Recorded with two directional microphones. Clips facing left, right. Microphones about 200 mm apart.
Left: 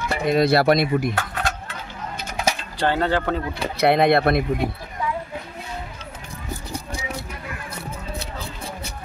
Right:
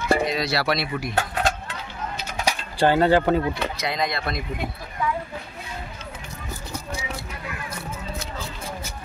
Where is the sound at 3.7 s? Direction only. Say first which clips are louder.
Left 10 dB; 60° left (ahead or behind).